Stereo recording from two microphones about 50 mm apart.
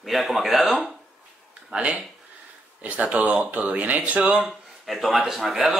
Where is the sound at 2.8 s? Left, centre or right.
Right.